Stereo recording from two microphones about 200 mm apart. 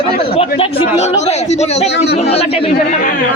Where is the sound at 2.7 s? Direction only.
45° left (ahead or behind).